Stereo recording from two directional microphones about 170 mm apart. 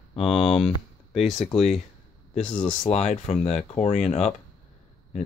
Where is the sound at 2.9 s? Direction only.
40° left (ahead or behind).